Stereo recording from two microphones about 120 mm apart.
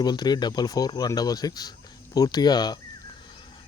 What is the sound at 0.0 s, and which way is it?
Speech, 35° left (ahead or behind).